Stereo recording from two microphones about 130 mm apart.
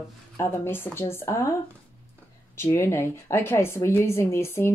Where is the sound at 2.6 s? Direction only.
20° left (ahead or behind).